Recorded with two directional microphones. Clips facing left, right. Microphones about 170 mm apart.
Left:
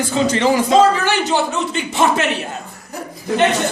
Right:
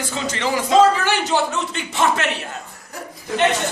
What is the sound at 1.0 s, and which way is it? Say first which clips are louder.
Speech: left 2 dB; 5° right (ahead or behind).